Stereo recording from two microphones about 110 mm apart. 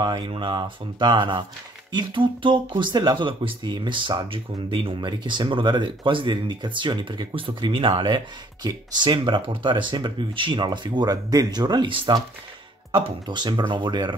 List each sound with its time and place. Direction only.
0.0 s speech: 40° right (ahead or behind)